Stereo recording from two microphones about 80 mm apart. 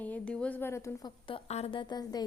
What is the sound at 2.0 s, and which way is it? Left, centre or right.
Speech, left.